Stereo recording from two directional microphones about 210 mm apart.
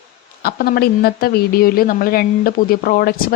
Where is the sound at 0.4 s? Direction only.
45° left (ahead or behind).